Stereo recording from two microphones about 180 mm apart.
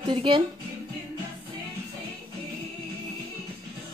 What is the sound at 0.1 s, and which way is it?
Speech, 25° right (ahead or behind).